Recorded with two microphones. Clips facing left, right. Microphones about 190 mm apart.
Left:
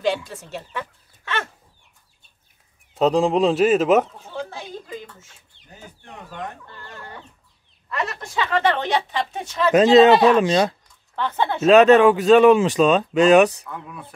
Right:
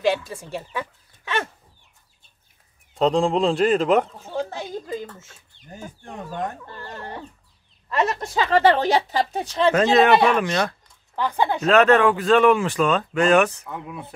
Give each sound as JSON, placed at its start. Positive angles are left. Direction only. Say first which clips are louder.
{"t": 0.0, "sound": "speech", "louder": "right 1 dB", "side_deg": -10}
{"t": 2.9, "sound": "speech", "louder": "left 2 dB", "side_deg": 5}
{"t": 4.4, "sound": "a sound", "louder": "right 4 dB", "side_deg": -40}
{"t": 8.1, "sound": "speech", "louder": "right 2 dB", "side_deg": -35}
{"t": 9.8, "sound": "speech", "louder": "left 6 dB", "side_deg": 20}
{"t": 11.1, "sound": "speech", "louder": "right 1 dB", "side_deg": -10}
{"t": 11.6, "sound": "speech", "louder": "left 5 dB", "side_deg": 20}
{"t": 13.7, "sound": "speech", "louder": "right 2 dB", "side_deg": -20}